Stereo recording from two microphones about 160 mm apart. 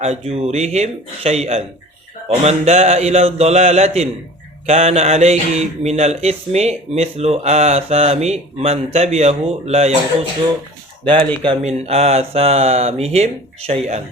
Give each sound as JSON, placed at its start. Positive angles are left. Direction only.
{"t": 0.0, "sound": "speech", "side_deg": -40}
{"t": 11.6, "sound": "speech", "side_deg": -40}